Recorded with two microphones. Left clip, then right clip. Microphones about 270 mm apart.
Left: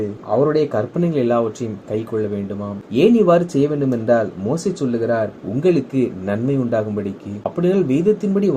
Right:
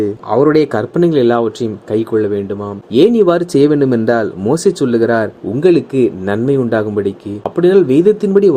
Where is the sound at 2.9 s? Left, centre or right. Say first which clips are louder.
Right 4 dB; right.